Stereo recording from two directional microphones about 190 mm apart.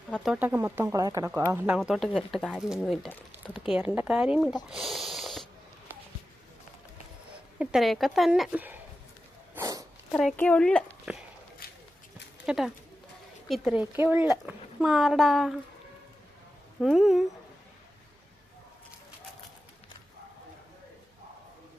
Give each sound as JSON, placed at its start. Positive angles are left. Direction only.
{"t": 0.1, "sound": "speech", "side_deg": 0}
{"t": 1.8, "sound": "a woman's voice", "side_deg": 0}
{"t": 7.6, "sound": "a woman's voice", "side_deg": 0}
{"t": 9.6, "sound": "a sound", "side_deg": -20}
{"t": 10.2, "sound": "a woman's voice", "side_deg": 5}
{"t": 11.6, "sound": "a sound", "side_deg": 55}
{"t": 12.5, "sound": "a woman's voice", "side_deg": 0}
{"t": 16.8, "sound": "a woman's voice", "side_deg": 0}